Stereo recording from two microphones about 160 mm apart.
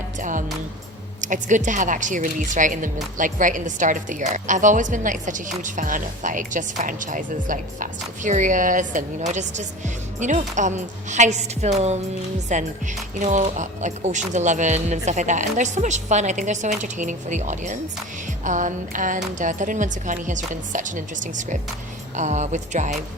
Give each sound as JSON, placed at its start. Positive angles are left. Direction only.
{"t": 0.2, "sound": "music", "side_deg": -55}
{"t": 1.2, "sound": "speech", "side_deg": -50}